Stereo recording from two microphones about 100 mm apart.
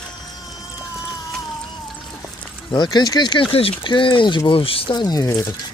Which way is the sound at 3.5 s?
60° left (ahead or behind).